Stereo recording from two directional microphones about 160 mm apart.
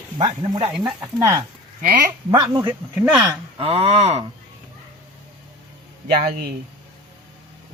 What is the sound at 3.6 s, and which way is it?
Speech, 40° right (ahead or behind).